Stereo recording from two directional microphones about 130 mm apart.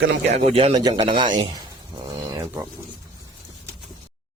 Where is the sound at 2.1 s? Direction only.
30° right (ahead or behind).